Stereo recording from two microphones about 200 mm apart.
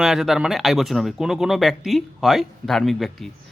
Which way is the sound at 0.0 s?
Centre (ahead or behind).